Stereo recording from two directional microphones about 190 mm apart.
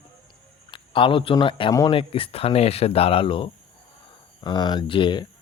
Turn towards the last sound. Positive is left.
turn(degrees=25)  # may be behind; listen again after turning